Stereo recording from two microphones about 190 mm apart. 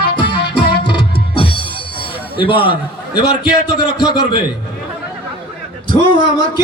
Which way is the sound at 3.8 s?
25° left (ahead or behind).